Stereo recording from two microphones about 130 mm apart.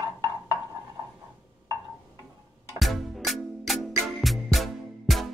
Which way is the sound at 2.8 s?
Centre (ahead or behind).